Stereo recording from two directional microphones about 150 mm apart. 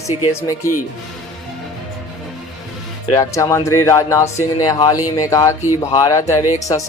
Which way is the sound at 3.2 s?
20° left (ahead or behind).